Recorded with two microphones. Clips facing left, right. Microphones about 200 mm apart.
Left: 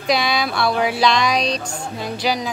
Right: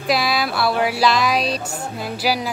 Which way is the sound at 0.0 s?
5° right (ahead or behind).